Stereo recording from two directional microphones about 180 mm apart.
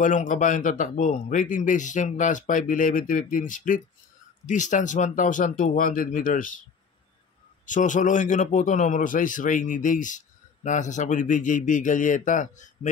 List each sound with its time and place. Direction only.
0.0 s a man's voice: 45° left (ahead or behind)
7.6 s a man's voice: 45° left (ahead or behind)